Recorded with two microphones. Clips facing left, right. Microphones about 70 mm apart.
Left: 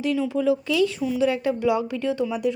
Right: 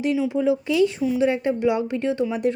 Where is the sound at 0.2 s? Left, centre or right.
Right.